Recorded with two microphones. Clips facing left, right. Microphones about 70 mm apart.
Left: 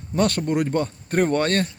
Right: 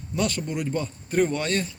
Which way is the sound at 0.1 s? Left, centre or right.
Left.